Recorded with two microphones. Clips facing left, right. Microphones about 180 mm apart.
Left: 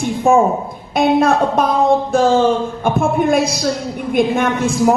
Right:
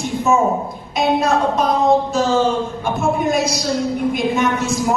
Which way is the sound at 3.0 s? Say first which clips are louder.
Left 2 dB; 55° left (ahead or behind).